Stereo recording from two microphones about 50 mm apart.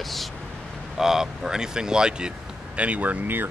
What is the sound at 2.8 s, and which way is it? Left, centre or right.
Speech, right.